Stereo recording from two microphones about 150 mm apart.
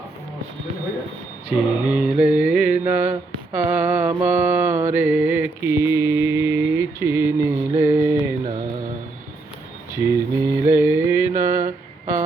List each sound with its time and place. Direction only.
1.5 s mantra: 10° right (ahead or behind)
3.5 s a sound: 10° right (ahead or behind)
4.2 s mantra: 10° right (ahead or behind)
9.9 s mantra: 20° right (ahead or behind)